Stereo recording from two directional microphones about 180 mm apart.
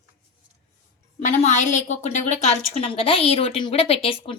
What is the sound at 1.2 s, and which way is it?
A woman's voice, 40° left (ahead or behind).